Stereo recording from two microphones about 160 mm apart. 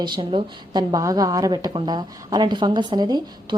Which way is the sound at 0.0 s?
30° right (ahead or behind).